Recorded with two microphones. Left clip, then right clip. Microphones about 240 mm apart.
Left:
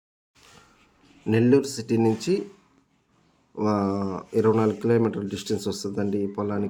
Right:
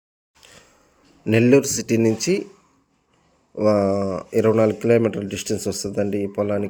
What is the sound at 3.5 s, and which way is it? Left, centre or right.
Speech, centre.